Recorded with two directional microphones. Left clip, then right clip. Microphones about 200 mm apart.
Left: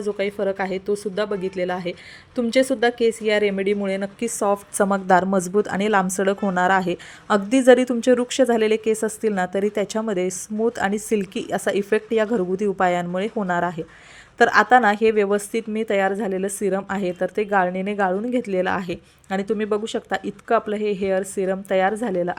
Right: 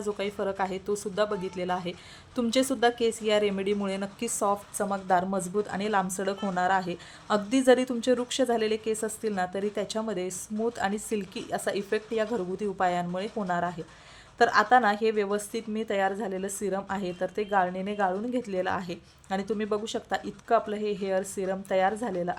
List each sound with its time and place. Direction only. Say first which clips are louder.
0.0 s a woman's voice: left 7 dB; 15° left (ahead or behind)
4.8 s a woman's voice: left 10 dB; 35° left (ahead or behind)